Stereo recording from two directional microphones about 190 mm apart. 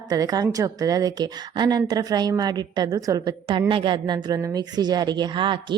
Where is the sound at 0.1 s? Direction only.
20° right (ahead or behind).